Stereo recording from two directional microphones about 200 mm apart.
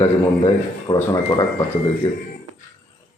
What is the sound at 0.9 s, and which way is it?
Speech, 25° left (ahead or behind).